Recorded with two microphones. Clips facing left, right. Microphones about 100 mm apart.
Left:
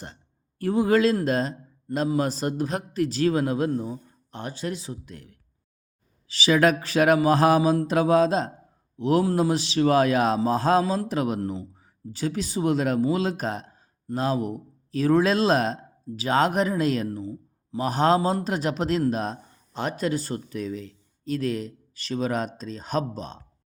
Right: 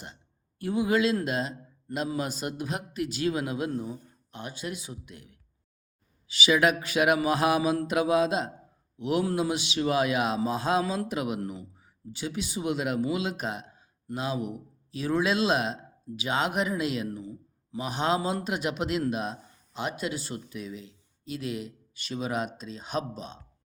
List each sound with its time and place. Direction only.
0.6 s a man's voice: 40° left (ahead or behind)